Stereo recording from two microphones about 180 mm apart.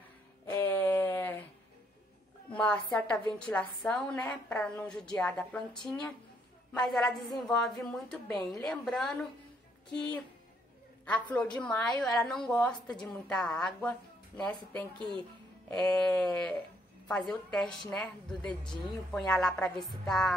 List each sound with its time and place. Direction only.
0.6 s a sound: 10° left (ahead or behind)
2.5 s a woman's voice: 5° left (ahead or behind)
11.1 s a sound: 10° left (ahead or behind)
12.0 s a woman's voice: centre (ahead or behind)
15.0 s speech: 25° right (ahead or behind)
15.7 s a sound: 5° left (ahead or behind)
17.3 s a woman's voice: 5° left (ahead or behind)
17.6 s a woman's voice: 25° left (ahead or behind)
17.9 s a woman's voice: 5° left (ahead or behind)